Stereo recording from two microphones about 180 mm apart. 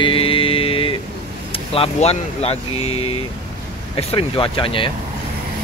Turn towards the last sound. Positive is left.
turn(degrees=30)  # may be behind; listen again after turning